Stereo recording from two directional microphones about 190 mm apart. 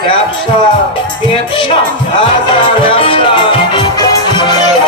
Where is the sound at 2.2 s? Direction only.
25° left (ahead or behind).